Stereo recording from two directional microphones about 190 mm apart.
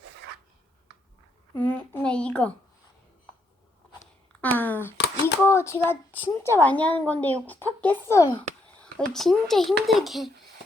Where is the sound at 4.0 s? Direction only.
10° left (ahead or behind).